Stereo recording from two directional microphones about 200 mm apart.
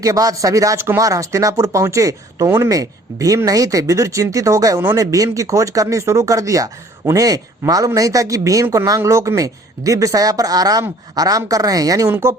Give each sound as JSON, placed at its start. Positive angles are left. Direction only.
{"t": 0.0, "sound": "speech", "side_deg": -15}